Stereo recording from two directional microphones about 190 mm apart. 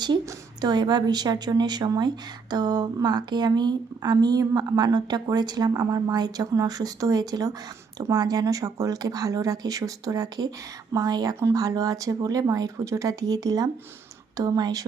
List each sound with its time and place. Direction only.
0.0 s a woman's voice: 20° right (ahead or behind)